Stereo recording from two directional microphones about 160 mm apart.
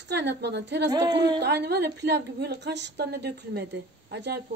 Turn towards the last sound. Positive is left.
turn(degrees=-90)